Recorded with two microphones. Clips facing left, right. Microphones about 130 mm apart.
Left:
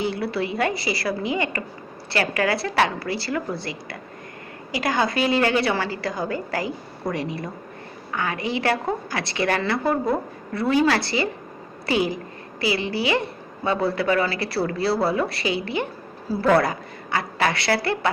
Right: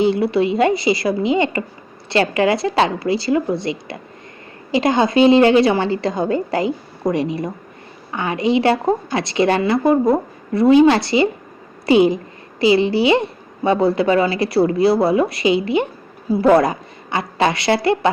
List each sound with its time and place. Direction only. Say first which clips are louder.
0.0 s a woman's voice: right 9 dB; 20° right (ahead or behind)